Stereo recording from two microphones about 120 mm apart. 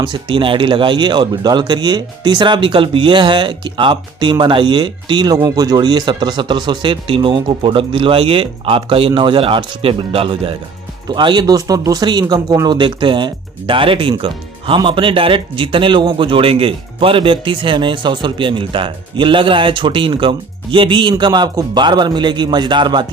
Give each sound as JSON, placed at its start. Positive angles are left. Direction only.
{"t": 0.0, "sound": "speech", "side_deg": -40}
{"t": 11.1, "sound": "speech", "side_deg": -40}